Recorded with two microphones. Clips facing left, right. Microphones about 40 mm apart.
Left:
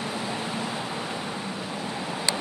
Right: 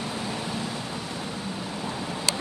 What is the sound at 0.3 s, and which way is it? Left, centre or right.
Vehicle, centre.